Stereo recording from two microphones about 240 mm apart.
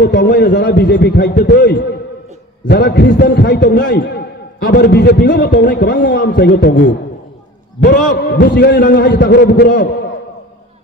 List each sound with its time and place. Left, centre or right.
0.0 s a man's voice: left
8.1 s a man's voice: left